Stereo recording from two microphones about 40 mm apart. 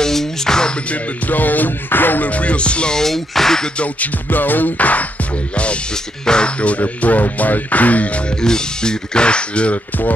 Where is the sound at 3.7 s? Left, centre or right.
Left.